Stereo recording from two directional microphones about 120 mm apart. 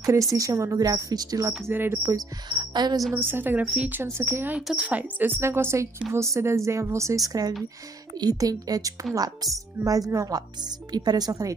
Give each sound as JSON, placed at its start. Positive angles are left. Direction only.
{"t": 0.3, "sound": "a woman's voice", "side_deg": -25}
{"t": 1.7, "sound": "speech", "side_deg": -20}
{"t": 2.1, "sound": "speech", "side_deg": -35}
{"t": 3.2, "sound": "speech", "side_deg": -20}
{"t": 4.6, "sound": "a woman's voice", "side_deg": -10}